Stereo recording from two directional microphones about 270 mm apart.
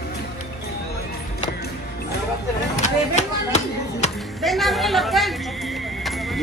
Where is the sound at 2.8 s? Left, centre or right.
Left.